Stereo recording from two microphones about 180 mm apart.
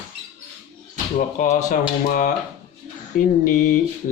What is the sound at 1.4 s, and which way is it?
Speech, 45° left (ahead or behind).